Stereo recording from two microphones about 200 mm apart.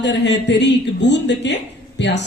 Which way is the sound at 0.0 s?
60° left (ahead or behind).